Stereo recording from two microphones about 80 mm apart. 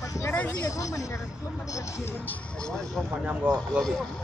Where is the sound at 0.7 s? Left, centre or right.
Left.